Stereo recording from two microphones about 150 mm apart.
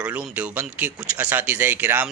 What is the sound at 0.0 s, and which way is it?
Speech, 10° right (ahead or behind).